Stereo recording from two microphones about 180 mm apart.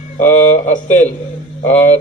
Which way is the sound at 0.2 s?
45° left (ahead or behind).